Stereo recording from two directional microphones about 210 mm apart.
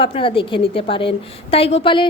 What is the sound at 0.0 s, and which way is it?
A woman's voice, 25° left (ahead or behind).